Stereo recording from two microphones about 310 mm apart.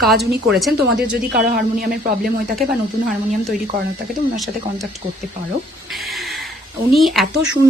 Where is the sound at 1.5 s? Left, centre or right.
Right.